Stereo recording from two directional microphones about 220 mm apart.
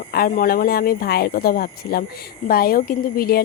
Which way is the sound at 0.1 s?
40° left (ahead or behind).